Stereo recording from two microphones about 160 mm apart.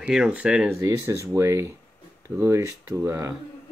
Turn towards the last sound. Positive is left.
turn(degrees=-15)  # may be behind; listen again after turning